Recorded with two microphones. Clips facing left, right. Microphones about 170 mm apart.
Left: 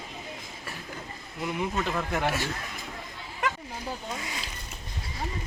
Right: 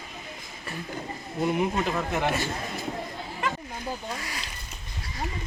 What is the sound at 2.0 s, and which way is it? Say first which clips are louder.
Speech: right 2 dB; centre (ahead or behind).